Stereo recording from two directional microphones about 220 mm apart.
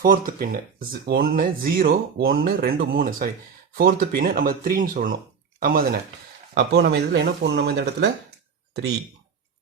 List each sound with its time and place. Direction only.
0.0 s speech: 40° right (ahead or behind)